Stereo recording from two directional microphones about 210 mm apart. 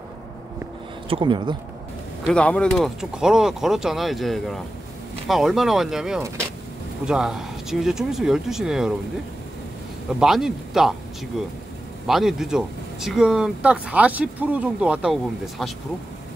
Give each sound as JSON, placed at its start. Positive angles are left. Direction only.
{"t": 1.0, "sound": "speech", "side_deg": -25}
{"t": 2.2, "sound": "speech", "side_deg": 5}
{"t": 10.1, "sound": "speech", "side_deg": 0}
{"t": 12.1, "sound": "speech", "side_deg": 0}